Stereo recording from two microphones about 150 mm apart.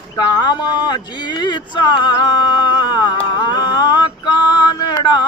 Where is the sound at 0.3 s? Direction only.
30° left (ahead or behind).